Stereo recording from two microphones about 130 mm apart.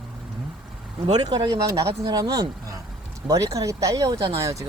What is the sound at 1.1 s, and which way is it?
Speech, 35° right (ahead or behind).